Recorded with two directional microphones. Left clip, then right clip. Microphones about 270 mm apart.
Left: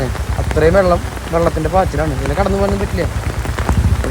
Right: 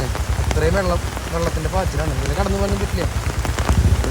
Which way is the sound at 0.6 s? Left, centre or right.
Centre.